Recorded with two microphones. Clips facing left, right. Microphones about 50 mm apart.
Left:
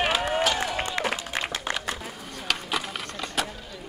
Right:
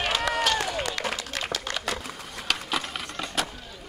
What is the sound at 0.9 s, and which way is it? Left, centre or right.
Applause, centre.